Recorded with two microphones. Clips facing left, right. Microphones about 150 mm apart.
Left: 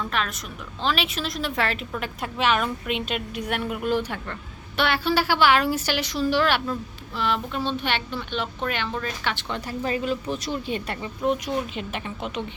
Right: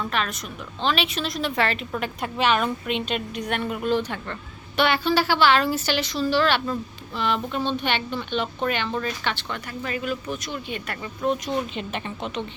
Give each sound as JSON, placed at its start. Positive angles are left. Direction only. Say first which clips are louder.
{"t": 0.0, "sound": "a woman's voice", "louder": "right 1 dB", "side_deg": 0}
{"t": 9.5, "sound": "speech", "louder": "left 3 dB", "side_deg": 30}